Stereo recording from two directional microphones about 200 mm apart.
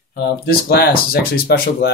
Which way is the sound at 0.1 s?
50° left (ahead or behind).